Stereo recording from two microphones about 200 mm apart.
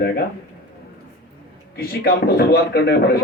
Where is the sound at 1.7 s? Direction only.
50° left (ahead or behind).